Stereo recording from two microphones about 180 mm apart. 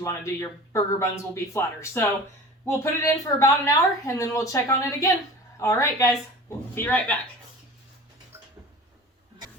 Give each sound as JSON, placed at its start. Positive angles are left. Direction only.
{"t": 0.0, "sound": "a woman's voice", "side_deg": 15}